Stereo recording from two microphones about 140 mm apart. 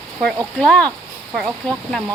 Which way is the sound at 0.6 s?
10° left (ahead or behind).